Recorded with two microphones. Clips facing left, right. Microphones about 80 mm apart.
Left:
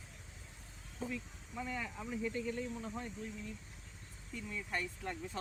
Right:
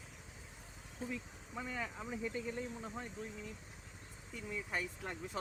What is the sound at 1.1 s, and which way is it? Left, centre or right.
Speech, centre.